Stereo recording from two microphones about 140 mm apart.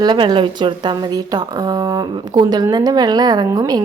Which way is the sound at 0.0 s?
30° right (ahead or behind).